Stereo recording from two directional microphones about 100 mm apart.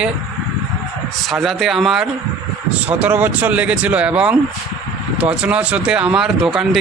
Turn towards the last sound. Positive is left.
turn(degrees=-5)  # may be behind; listen again after turning